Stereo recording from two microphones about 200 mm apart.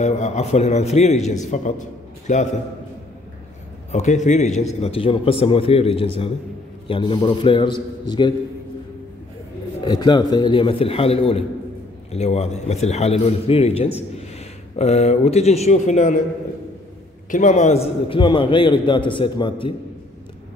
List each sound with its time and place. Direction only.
0.0 s a man's voice: 35° left (ahead or behind)
3.9 s a man's voice: 35° left (ahead or behind)
9.8 s a man's voice: 20° left (ahead or behind)
17.3 s a man's voice: 35° left (ahead or behind)
18.0 s a man's voice: 25° left (ahead or behind)